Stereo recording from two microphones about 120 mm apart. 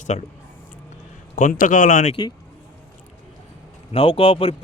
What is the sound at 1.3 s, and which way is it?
Speech, 90° left.